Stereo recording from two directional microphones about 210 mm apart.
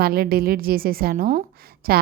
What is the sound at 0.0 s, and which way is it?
A woman's voice, 45° right (ahead or behind).